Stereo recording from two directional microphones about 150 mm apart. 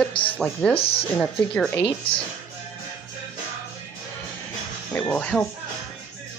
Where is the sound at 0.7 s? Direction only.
40° left (ahead or behind).